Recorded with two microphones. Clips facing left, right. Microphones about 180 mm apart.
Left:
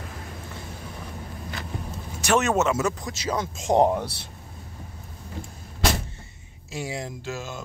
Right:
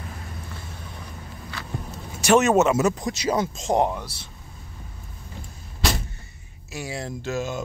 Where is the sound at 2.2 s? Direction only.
5° right (ahead or behind).